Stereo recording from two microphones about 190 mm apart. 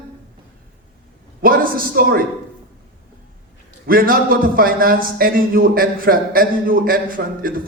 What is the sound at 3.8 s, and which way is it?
A man's voice, 50° right (ahead or behind).